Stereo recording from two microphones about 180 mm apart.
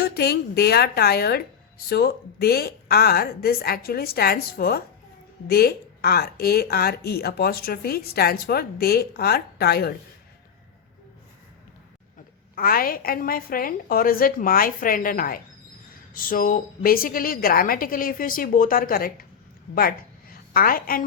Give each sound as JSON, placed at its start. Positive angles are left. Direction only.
{"t": 0.0, "sound": "speech", "side_deg": 60}
{"t": 12.5, "sound": "a woman's voice", "side_deg": 55}
{"t": 20.3, "sound": "a woman's voice", "side_deg": 55}